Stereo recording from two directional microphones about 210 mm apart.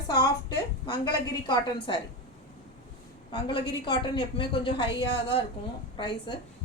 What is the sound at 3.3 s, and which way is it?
A woman's voice, 25° left (ahead or behind).